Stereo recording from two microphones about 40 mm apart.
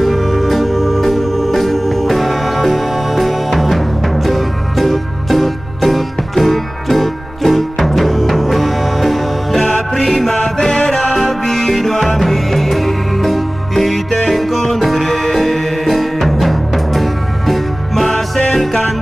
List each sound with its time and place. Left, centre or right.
0.0 s music: centre
9.7 s music: left
10.0 s music: centre
10.3 s music: centre